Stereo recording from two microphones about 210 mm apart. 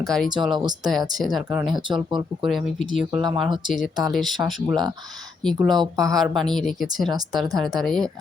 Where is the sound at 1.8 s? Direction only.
20° right (ahead or behind).